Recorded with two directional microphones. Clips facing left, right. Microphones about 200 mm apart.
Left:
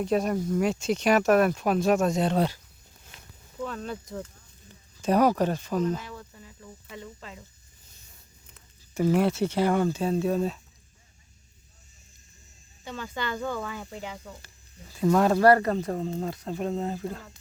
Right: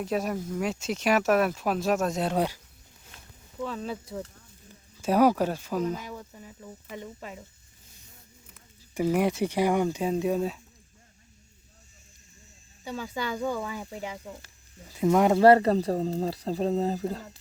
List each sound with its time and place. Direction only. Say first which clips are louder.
0.0 s speech: left 4 dB; 5° right (ahead or behind)
3.6 s speech: right 1 dB; centre (ahead or behind)
4.9 s speech: even; 10° right (ahead or behind)
8.5 s speech: left 1 dB; 10° right (ahead or behind)
12.8 s speech: right 1 dB; 10° right (ahead or behind); by 17.2 s 35° right (ahead or behind)